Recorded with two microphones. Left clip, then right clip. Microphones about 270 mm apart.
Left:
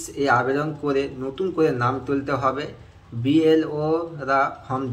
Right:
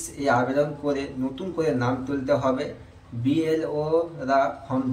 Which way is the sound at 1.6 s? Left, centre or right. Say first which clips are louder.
Left 3 dB; centre.